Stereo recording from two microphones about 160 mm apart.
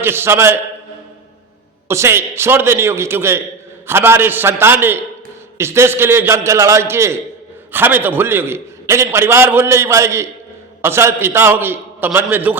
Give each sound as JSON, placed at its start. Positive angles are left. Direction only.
{"t": 0.0, "sound": "a man's voice", "side_deg": -15}
{"t": 1.9, "sound": "a man's voice", "side_deg": -15}